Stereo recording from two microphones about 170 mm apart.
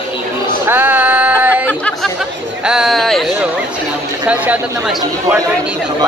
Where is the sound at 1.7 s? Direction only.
5° left (ahead or behind); by 4.9 s 10° right (ahead or behind).